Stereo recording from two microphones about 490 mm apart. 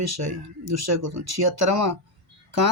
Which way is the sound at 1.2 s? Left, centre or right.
Right.